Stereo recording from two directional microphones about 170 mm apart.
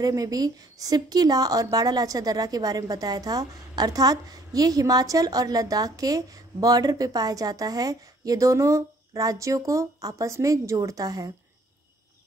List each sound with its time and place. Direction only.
0.0 s a woman's voice: 20° right (ahead or behind)